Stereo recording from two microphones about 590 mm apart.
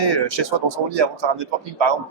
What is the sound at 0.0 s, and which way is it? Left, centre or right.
Speech, right.